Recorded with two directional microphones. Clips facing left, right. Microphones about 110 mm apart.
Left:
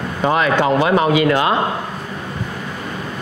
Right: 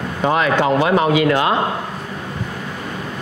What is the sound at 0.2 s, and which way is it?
A man's voice, 25° left (ahead or behind).